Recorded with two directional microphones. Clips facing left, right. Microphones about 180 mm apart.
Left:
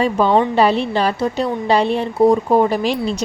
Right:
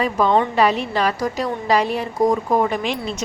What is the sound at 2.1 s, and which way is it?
Speech, 10° left (ahead or behind).